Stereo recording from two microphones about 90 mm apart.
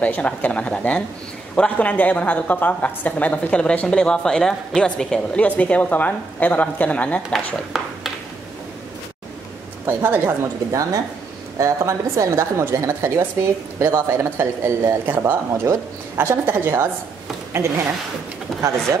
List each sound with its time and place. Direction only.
0.0 s a woman's voice: 15° left (ahead or behind)
7.2 s speech: centre (ahead or behind)
9.8 s speech: 25° right (ahead or behind)
10.7 s a woman's voice: 40° right (ahead or behind)
15.0 s speech: 20° right (ahead or behind)
18.5 s speech: centre (ahead or behind)